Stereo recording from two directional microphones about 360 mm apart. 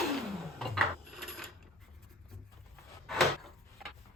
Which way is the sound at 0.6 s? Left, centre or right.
Centre.